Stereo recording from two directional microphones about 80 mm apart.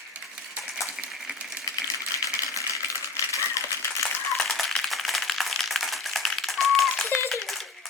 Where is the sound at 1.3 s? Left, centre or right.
Centre.